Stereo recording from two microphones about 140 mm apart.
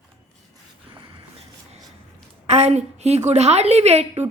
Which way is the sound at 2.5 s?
50° right (ahead or behind).